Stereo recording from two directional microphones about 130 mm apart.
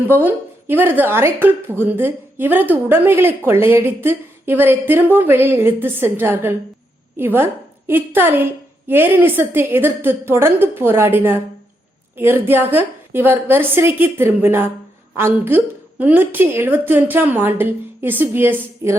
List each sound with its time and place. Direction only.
0.1 s a woman's voice: 15° right (ahead or behind)